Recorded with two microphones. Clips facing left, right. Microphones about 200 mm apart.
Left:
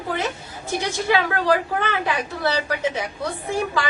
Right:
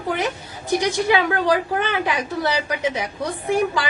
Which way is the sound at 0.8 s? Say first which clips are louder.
Right 1 dB; 15° right (ahead or behind).